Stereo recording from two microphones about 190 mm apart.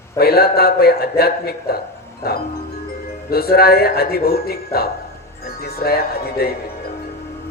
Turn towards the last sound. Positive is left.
turn(degrees=55)  # may be behind; listen again after turning